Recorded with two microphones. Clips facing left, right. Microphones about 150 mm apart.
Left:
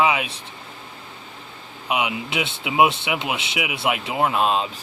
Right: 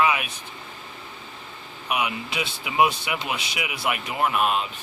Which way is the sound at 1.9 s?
20° left (ahead or behind).